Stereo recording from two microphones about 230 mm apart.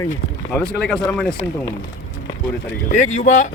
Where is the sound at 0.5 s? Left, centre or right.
Centre.